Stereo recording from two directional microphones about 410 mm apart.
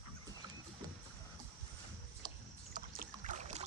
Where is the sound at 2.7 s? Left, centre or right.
Right.